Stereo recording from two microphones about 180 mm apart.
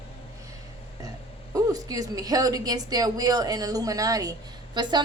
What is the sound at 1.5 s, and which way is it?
A woman's voice, 20° right (ahead or behind).